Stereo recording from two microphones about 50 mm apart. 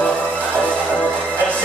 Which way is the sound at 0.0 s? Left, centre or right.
Left.